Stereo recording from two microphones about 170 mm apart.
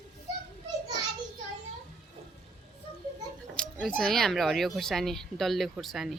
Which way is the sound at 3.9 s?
Centre (ahead or behind).